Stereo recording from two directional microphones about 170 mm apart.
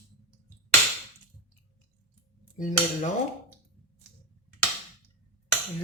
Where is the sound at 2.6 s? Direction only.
50° left (ahead or behind).